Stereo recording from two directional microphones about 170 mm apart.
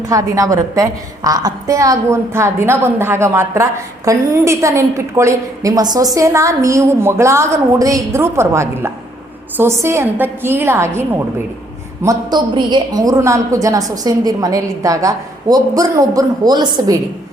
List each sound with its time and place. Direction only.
0.1 s a woman's voice: 20° right (ahead or behind)
12.0 s a woman's voice: 25° right (ahead or behind)